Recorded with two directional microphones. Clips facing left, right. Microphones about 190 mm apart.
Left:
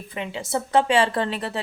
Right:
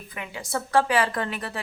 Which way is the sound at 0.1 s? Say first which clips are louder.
Left 4 dB; 25° left (ahead or behind).